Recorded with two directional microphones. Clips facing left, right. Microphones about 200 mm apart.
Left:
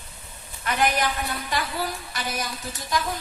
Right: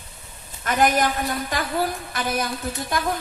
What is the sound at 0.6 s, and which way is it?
A woman's voice, 45° right (ahead or behind).